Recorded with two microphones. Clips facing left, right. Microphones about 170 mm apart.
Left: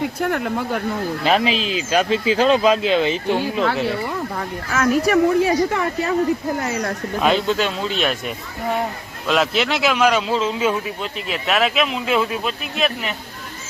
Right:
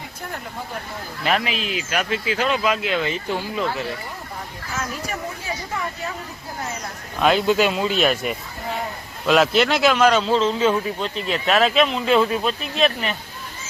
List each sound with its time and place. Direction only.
0.2 s speech: 80° left
1.2 s speech: 25° left (ahead or behind)
4.4 s speech: 75° left (ahead or behind)
7.2 s a man's voice: centre (ahead or behind)